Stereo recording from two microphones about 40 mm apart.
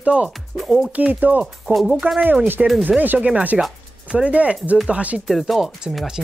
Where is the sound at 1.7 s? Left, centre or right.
Centre.